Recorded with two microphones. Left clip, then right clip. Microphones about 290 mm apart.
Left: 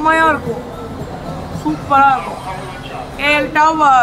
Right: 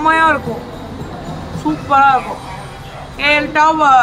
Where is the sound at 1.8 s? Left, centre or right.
Centre.